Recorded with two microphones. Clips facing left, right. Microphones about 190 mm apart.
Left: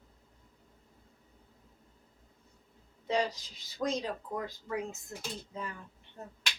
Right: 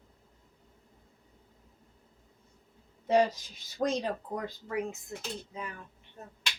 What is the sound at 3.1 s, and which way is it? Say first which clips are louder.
Speech: right 6 dB; 55° right (ahead or behind).